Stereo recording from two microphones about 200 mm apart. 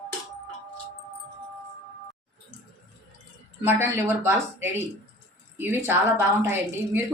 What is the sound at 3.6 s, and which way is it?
A woman's voice, 10° right (ahead or behind).